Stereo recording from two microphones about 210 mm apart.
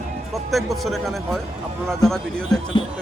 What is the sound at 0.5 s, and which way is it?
Speech, centre (ahead or behind).